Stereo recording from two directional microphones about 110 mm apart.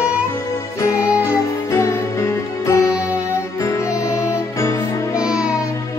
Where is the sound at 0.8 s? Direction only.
25° left (ahead or behind).